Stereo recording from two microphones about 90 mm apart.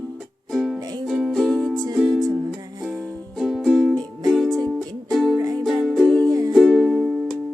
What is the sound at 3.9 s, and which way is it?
Music, 50° right (ahead or behind).